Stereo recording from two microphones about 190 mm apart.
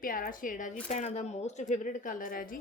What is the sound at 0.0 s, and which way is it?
Speech, 45° left (ahead or behind).